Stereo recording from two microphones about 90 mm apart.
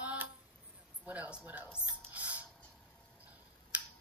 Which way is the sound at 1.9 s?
15° right (ahead or behind).